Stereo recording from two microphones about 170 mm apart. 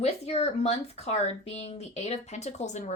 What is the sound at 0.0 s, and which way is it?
Speech, 40° left (ahead or behind).